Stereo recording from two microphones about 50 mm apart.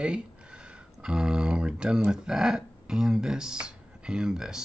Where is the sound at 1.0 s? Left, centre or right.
Centre.